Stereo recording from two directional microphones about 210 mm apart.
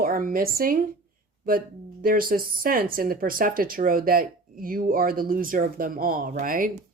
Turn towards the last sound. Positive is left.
turn(degrees=-40)  # may be behind; listen again after turning